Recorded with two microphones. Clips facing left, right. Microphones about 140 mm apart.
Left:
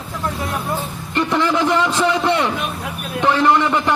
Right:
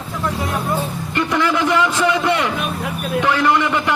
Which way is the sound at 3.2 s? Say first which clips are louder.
Left 3 dB; 30° left (ahead or behind).